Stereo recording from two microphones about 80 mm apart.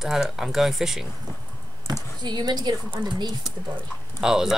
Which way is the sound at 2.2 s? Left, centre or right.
Right.